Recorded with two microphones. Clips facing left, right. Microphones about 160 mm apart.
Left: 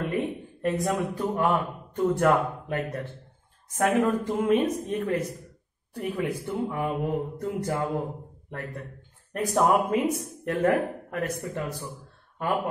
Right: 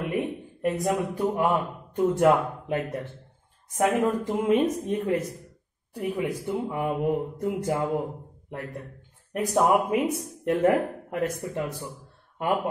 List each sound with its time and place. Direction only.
0.0 s a man's voice: 15° right (ahead or behind)